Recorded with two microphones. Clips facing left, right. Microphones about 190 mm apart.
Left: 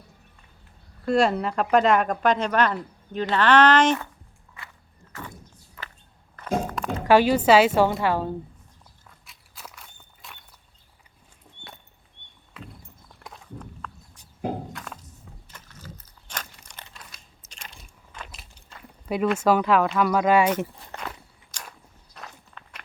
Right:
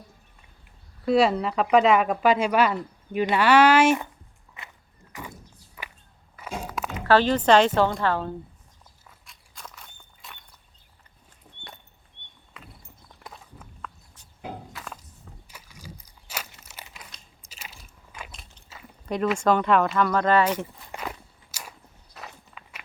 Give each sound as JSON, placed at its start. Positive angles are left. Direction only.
{"t": 1.0, "sound": "speech", "side_deg": 0}
{"t": 4.6, "sound": "walk", "side_deg": -20}
{"t": 5.1, "sound": "a sound", "side_deg": -10}
{"t": 7.0, "sound": "a woman's voice", "side_deg": 10}
{"t": 9.0, "sound": "walk", "side_deg": 5}
{"t": 12.5, "sound": "walk", "side_deg": 0}
{"t": 14.7, "sound": "a sound", "side_deg": 0}
{"t": 16.6, "sound": "crumpling", "side_deg": -10}
{"t": 17.5, "sound": "biting", "side_deg": -5}
{"t": 18.3, "sound": "a sound", "side_deg": 5}
{"t": 19.4, "sound": "a woman's voice", "side_deg": 5}
{"t": 20.9, "sound": "walk", "side_deg": -10}